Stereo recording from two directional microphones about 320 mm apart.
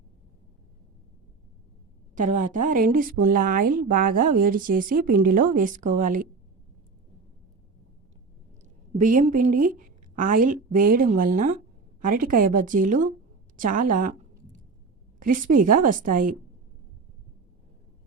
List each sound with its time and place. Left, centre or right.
2.1 s a woman's voice: right
8.9 s a woman's voice: right
13.6 s a sound: right
15.2 s a woman's voice: right